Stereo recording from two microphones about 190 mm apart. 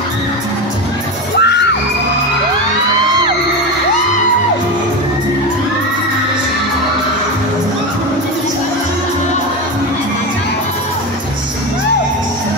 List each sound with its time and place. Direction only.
1.4 s music: 60° left (ahead or behind)